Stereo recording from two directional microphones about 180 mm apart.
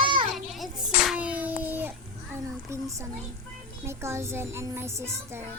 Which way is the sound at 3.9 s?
15° right (ahead or behind).